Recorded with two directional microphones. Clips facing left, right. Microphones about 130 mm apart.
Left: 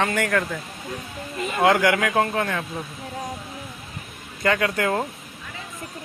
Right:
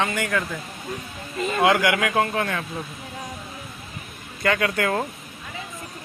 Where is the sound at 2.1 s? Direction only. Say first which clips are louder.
Left 1 dB; 25° left (ahead or behind).